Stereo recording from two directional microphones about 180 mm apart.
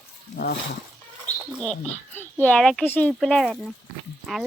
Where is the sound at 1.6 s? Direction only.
5° left (ahead or behind).